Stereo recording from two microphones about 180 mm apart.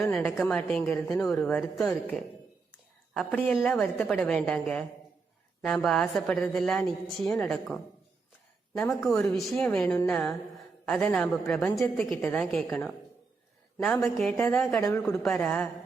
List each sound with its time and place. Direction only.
0.0 s a woman's voice: 5° left (ahead or behind)
15.0 s a woman's voice: 5° left (ahead or behind)